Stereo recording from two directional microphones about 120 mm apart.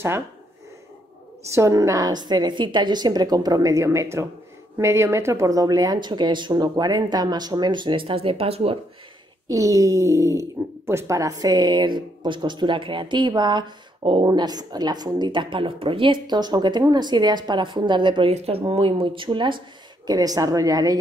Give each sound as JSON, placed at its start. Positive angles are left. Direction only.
{"t": 1.5, "sound": "speech", "side_deg": -25}
{"t": 9.5, "sound": "speech", "side_deg": -25}
{"t": 18.3, "sound": "speech", "side_deg": -55}
{"t": 20.1, "sound": "speech", "side_deg": -30}